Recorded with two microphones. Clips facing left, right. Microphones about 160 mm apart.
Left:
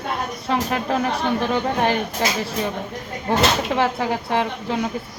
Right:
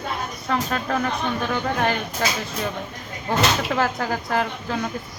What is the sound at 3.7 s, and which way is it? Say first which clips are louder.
A woman's voice: left 2 dB; 25° left (ahead or behind).